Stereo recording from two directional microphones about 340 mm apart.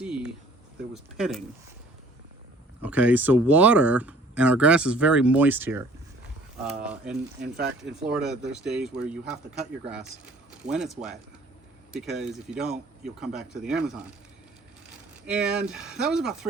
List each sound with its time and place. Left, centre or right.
0.0 s a sound: centre
2.8 s speech: centre
6.8 s speech: centre
7.4 s speech: right
7.8 s speech: centre
10.7 s speech: centre
15.3 s speech: centre